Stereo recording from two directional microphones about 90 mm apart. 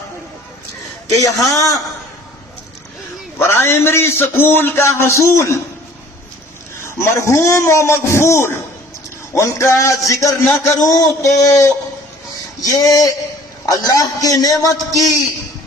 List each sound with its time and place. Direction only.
1.1 s a man's voice: 40° left (ahead or behind)
3.3 s a man's voice: 30° left (ahead or behind)
6.8 s a man's voice: 30° left (ahead or behind)